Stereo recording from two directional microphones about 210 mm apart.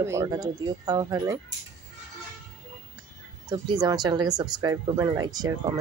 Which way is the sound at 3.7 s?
20° right (ahead or behind).